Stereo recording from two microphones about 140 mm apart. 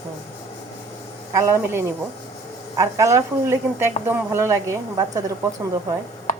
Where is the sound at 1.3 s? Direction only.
20° right (ahead or behind).